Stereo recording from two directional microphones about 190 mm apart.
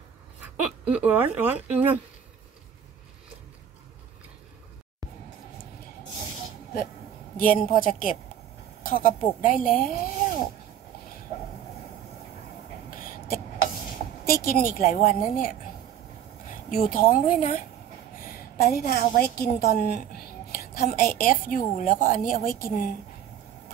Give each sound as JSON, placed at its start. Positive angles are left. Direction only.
{"t": 0.4, "sound": "speech", "side_deg": -10}
{"t": 7.3, "sound": "speech", "side_deg": 45}
{"t": 12.9, "sound": "a sound", "side_deg": 50}
{"t": 14.3, "sound": "speech", "side_deg": 50}
{"t": 16.7, "sound": "a woman's voice", "side_deg": 45}